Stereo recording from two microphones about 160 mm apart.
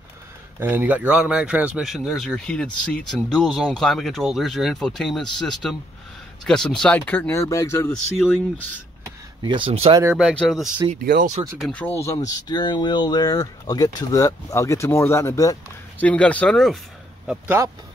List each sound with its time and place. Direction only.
0.6 s a man's voice: 10° right (ahead or behind); by 7.9 s 20° left (ahead or behind)
9.4 s speech: 30° right (ahead or behind)
10.1 s a man's voice: 5° left (ahead or behind)
11.0 s speech: 60° right (ahead or behind)
11.5 s speech: 5° left (ahead or behind)
12.3 s speech: 25° left (ahead or behind); by 16.7 s 5° left (ahead or behind)
17.3 s speech: 15° right (ahead or behind)